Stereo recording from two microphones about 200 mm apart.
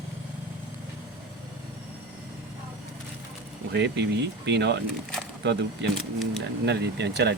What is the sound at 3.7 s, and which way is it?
Speech, 60° right (ahead or behind).